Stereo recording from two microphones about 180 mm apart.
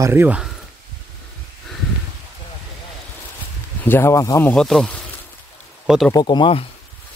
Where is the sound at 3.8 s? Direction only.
15° left (ahead or behind).